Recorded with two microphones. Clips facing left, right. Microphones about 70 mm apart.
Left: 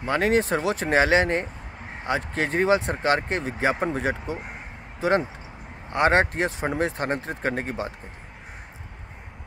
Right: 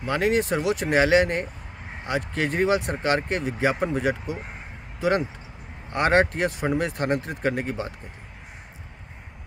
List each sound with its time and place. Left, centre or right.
0.0 s speech: left
5.9 s speech: left